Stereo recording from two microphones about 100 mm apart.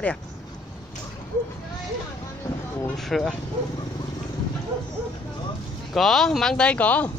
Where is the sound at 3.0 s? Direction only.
Centre (ahead or behind).